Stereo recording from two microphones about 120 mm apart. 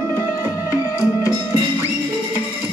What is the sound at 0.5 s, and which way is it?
Music, 25° left (ahead or behind).